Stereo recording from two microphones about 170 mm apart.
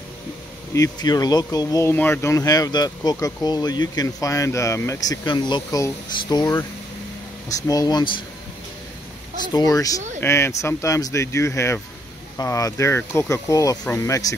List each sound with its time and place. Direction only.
0.7 s speech: 20° left (ahead or behind)
9.5 s speech: 20° left (ahead or behind)